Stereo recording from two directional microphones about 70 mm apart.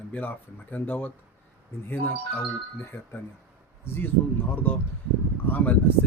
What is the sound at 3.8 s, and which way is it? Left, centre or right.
A man's voice, left.